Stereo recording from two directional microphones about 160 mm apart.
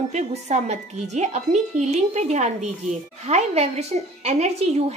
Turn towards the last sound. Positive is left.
turn(degrees=-40)  # may be behind; listen again after turning